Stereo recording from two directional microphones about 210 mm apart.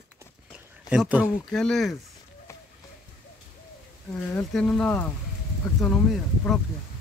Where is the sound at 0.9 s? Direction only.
5° right (ahead or behind).